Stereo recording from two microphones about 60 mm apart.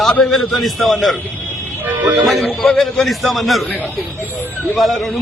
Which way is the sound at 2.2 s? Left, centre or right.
Centre.